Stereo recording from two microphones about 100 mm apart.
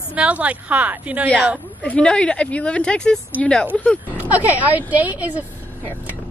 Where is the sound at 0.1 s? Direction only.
10° right (ahead or behind).